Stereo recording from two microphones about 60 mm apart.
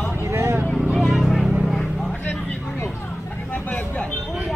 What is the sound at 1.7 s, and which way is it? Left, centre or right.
Vehicle, centre.